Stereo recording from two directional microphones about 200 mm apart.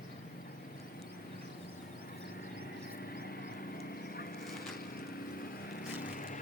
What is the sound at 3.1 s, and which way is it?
Duck, 50° left (ahead or behind).